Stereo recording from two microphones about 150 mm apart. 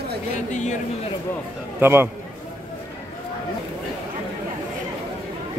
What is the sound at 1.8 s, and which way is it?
Speech, 15° right (ahead or behind).